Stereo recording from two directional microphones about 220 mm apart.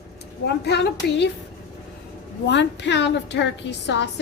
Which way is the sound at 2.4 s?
55° left (ahead or behind).